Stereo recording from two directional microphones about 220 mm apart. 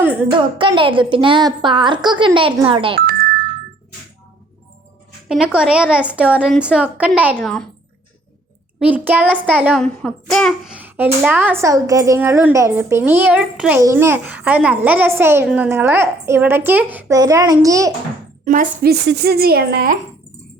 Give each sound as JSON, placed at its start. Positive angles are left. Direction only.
{"t": 0.3, "sound": "a woman's voice", "side_deg": -20}
{"t": 5.3, "sound": "a woman's voice", "side_deg": -5}
{"t": 8.8, "sound": "a child's voice", "side_deg": -10}
{"t": 9.8, "sound": "a child's voice", "side_deg": 5}
{"t": 18.4, "sound": "speech", "side_deg": -35}